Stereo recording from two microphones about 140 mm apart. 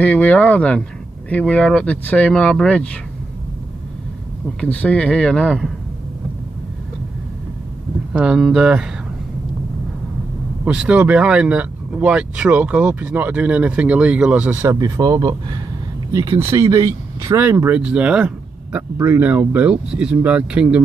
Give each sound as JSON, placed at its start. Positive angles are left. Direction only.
{"t": 0.0, "sound": "speech", "side_deg": 10}
{"t": 4.6, "sound": "speech", "side_deg": 10}
{"t": 8.1, "sound": "speech", "side_deg": -5}
{"t": 10.6, "sound": "speech", "side_deg": -10}
{"t": 14.7, "sound": "speech", "side_deg": -25}